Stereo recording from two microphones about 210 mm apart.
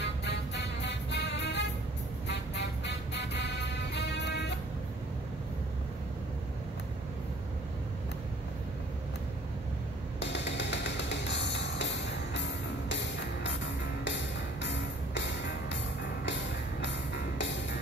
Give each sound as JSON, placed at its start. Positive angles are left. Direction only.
{"t": 0.0, "sound": "music", "side_deg": 55}
{"t": 10.2, "sound": "music", "side_deg": 55}
{"t": 14.6, "sound": "music", "side_deg": 55}